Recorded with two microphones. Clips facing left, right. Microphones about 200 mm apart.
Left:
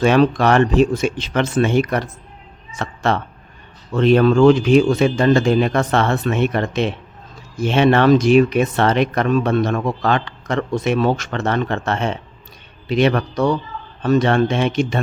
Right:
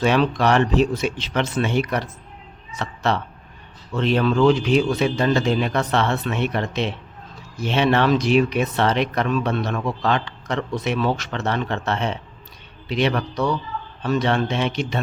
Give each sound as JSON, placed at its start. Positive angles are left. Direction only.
{"t": 0.0, "sound": "speech", "side_deg": 50}